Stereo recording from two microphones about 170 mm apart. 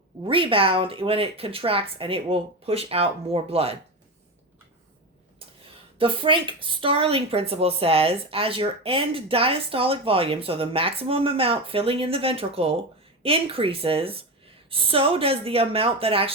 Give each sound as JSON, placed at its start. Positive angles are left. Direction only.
{"t": 0.3, "sound": "speech", "side_deg": -30}
{"t": 6.0, "sound": "speech", "side_deg": -30}